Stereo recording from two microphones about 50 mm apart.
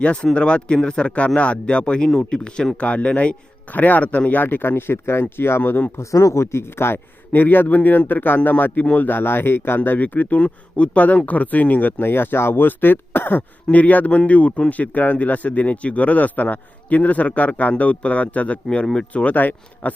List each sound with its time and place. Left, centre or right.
0.0 s speech: left
6.0 s speech: left
8.8 s speech: left
9.0 s speech: left
13.7 s speech: left